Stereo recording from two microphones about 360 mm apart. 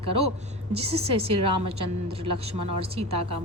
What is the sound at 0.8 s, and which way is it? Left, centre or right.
Speech, centre.